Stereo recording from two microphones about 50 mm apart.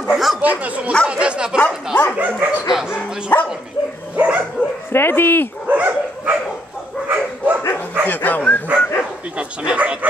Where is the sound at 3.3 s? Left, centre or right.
Left.